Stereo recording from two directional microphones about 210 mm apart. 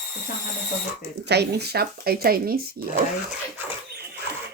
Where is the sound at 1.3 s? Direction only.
50° right (ahead or behind).